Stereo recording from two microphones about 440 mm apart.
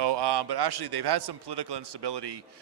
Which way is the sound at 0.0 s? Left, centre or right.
Right.